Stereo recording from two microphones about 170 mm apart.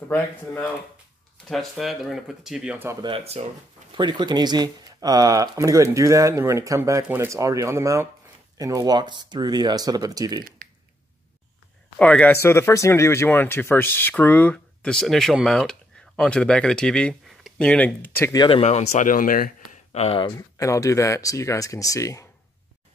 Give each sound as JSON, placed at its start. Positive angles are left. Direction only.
{"t": 1.5, "sound": "speech", "side_deg": 0}
{"t": 2.9, "sound": "speech", "side_deg": -25}
{"t": 12.0, "sound": "speech", "side_deg": 10}
{"t": 18.4, "sound": "a man's voice", "side_deg": 35}
{"t": 19.9, "sound": "speech", "side_deg": 35}
{"t": 20.3, "sound": "speech", "side_deg": 20}